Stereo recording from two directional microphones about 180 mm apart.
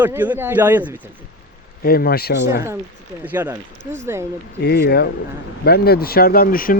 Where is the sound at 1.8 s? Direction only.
55° left (ahead or behind).